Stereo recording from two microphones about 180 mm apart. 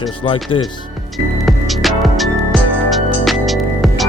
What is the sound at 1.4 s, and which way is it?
Music, centre (ahead or behind).